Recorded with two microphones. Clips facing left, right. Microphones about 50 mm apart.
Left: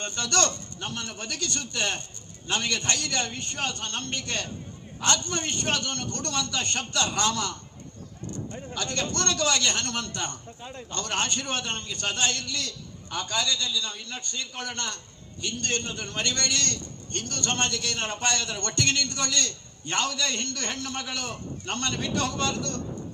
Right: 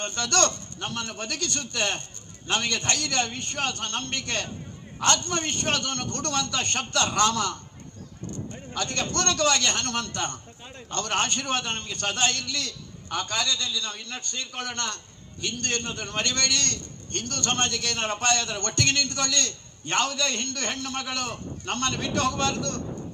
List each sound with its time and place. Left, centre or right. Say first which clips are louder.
0.0 s a man's voice: right 2 dB; right
8.7 s a man's voice: right 2 dB; right